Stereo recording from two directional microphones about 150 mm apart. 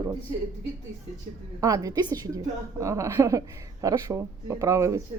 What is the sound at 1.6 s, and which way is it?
A woman's voice, 25° right (ahead or behind).